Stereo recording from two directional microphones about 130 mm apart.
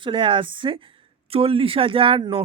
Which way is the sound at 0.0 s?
40° right (ahead or behind).